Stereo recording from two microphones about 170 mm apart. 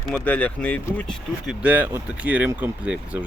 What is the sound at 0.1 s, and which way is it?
Speech, 10° left (ahead or behind).